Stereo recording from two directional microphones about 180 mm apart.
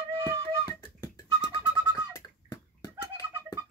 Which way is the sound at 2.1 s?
20° left (ahead or behind).